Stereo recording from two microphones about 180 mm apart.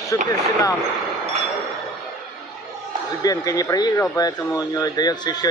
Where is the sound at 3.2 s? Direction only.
20° left (ahead or behind).